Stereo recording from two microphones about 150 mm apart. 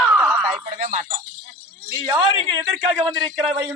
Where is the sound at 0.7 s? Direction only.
55° right (ahead or behind).